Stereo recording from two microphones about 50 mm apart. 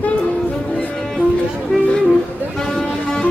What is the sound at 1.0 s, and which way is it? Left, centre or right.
Music, centre.